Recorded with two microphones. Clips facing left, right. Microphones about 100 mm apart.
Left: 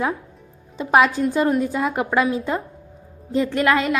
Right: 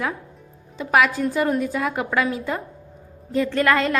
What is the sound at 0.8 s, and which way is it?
A woman's voice, 25° left (ahead or behind).